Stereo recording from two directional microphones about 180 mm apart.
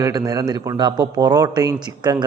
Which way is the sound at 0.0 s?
20° right (ahead or behind).